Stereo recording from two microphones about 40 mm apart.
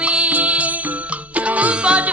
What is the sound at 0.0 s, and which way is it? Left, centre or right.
Music, right.